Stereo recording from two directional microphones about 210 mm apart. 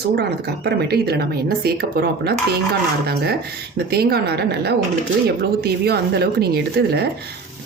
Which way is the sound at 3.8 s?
50° right (ahead or behind).